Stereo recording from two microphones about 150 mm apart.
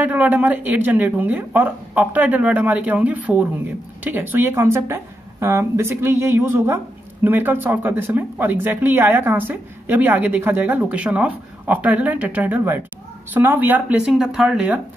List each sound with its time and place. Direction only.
0.0 s speech: 10° right (ahead or behind)